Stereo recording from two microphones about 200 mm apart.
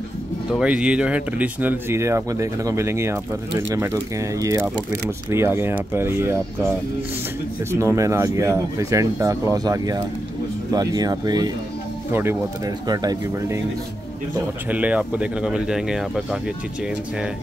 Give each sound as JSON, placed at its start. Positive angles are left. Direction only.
{"t": 0.5, "sound": "speech", "side_deg": -5}
{"t": 7.7, "sound": "speech", "side_deg": -15}
{"t": 14.7, "sound": "speech", "side_deg": -5}